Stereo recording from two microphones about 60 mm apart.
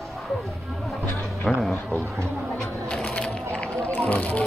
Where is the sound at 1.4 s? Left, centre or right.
Centre.